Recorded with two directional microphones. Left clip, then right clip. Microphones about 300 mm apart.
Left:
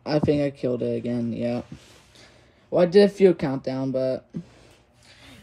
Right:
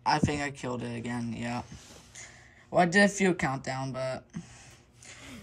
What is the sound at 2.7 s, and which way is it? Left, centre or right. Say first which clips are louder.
Speech: left 6 dB; right.